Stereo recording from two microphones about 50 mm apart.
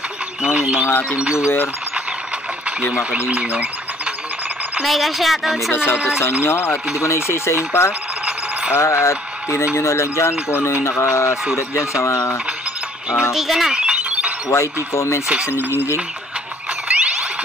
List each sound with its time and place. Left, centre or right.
0.4 s speech: centre
2.9 s speech: right
4.8 s speech: centre
6.4 s speech: left
7.0 s speech: left
13.3 s speech: centre
13.7 s a sound: right
14.5 s speech: left
15.4 s speech: left
16.8 s a sound: right